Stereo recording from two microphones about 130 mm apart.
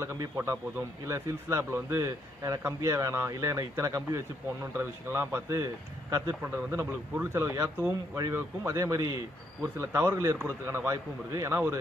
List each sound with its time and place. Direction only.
0.0 s a man's voice: 20° right (ahead or behind)